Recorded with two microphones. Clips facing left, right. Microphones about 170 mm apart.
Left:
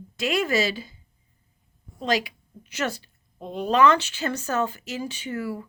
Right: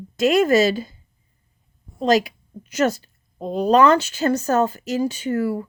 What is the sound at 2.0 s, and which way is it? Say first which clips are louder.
A woman's voice: right 7 dB; 40° right (ahead or behind).